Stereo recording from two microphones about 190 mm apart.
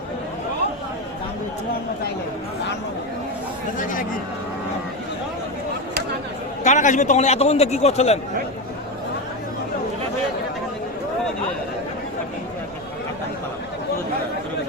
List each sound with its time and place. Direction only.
3.8 s speech: 45° left (ahead or behind)
6.7 s a man's voice: 40° left (ahead or behind)